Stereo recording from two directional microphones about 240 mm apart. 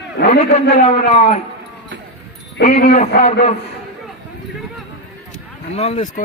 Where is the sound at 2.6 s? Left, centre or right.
Left.